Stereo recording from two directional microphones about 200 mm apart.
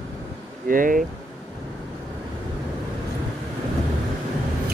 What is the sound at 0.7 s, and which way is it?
Speech, 45° right (ahead or behind).